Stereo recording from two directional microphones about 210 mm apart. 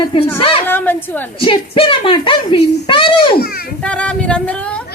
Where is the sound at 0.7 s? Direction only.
10° left (ahead or behind).